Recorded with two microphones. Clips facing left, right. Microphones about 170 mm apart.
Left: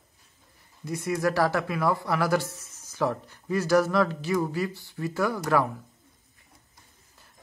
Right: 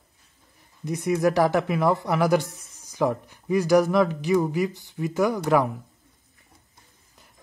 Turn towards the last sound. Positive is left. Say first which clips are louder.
# right 4 dB
turn(degrees=-15)  # may be behind; listen again after turning